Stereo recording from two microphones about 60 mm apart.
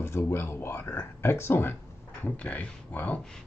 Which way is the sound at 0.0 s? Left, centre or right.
Left.